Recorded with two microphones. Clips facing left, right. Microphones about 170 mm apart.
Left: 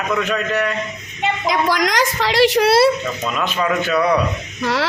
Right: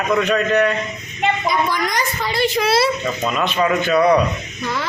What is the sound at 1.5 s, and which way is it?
A woman's voice, 90° left.